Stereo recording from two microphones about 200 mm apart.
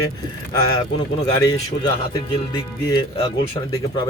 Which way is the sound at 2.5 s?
20° left (ahead or behind).